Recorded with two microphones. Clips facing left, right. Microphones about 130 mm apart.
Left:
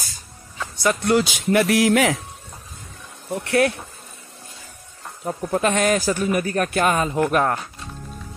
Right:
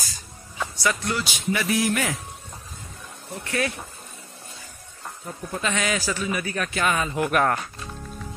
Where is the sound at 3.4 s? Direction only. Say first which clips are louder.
Left 8 dB; 70° left (ahead or behind).